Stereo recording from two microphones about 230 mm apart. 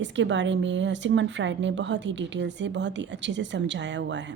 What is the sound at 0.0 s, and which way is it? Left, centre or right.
A woman's voice, right.